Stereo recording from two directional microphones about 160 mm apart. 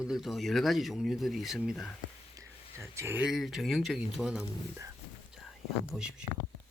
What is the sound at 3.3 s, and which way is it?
Speech, centre (ahead or behind).